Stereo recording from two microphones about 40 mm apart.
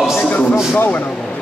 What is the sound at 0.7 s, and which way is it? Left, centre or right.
Speech, left.